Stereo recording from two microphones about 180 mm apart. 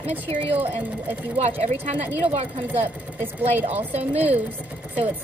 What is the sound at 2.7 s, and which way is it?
Speech, 10° right (ahead or behind).